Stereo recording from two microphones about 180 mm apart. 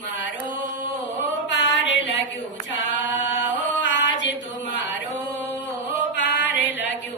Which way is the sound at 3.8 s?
90° left.